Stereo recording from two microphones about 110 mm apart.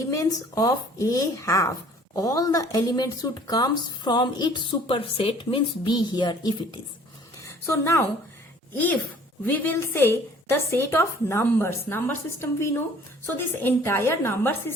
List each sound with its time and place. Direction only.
0.1 s speech: 30° left (ahead or behind)
4.9 s a woman's voice: 60° left (ahead or behind); by 6.6 s 40° left (ahead or behind)
7.4 s a sound: 25° left (ahead or behind)
9.5 s a woman's voice: 15° left (ahead or behind)